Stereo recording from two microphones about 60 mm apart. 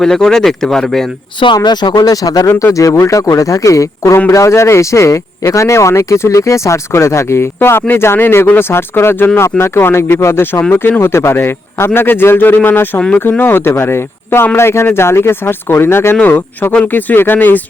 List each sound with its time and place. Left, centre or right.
0.0 s speech: centre
1.5 s speech: left
2.7 s speech: left
11.0 s speech: left